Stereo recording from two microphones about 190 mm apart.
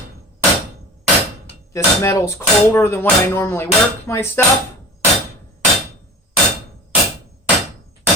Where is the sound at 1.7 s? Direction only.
15° left (ahead or behind).